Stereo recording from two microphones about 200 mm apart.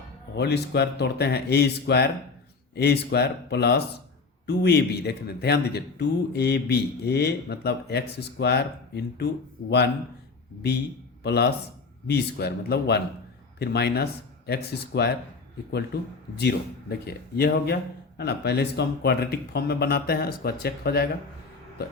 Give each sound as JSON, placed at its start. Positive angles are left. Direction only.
{"t": 0.3, "sound": "a man's voice", "side_deg": 55}
{"t": 11.2, "sound": "a man's voice", "side_deg": 55}
{"t": 16.4, "sound": "speech", "side_deg": 55}